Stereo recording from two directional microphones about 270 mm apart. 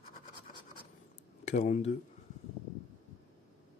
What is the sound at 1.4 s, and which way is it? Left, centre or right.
Speech, left.